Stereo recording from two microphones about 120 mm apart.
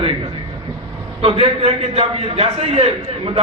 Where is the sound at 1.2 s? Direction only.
55° right (ahead or behind).